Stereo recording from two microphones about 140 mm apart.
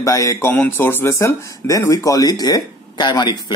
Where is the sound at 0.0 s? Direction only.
25° left (ahead or behind).